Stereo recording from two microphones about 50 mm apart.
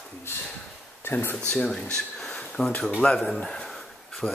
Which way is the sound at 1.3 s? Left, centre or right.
Centre.